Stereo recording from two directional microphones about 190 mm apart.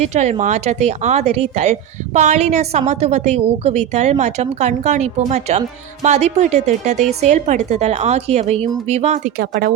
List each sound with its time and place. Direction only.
0.0 s a woman's voice: 35° right (ahead or behind)
9.4 s speech: 50° right (ahead or behind)